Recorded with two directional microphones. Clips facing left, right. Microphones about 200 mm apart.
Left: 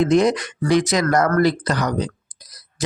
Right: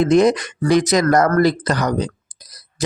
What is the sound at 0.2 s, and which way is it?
Speech, 45° right (ahead or behind).